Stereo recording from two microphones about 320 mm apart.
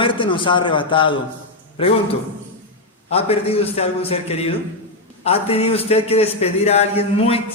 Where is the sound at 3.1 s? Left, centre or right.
Centre.